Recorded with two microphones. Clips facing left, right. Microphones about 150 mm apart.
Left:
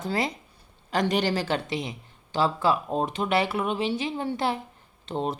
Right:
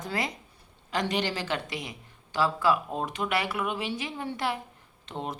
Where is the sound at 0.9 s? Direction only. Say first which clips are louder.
Left 4 dB; 40° left (ahead or behind).